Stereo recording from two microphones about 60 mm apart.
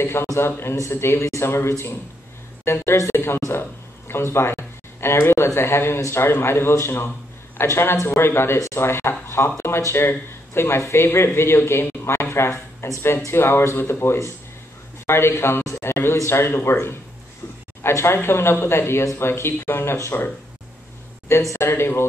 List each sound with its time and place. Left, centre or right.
0.0 s a sound: left
0.9 s a woman's voice: left
9.9 s a man's voice: left
17.8 s speech: left
21.5 s speech: left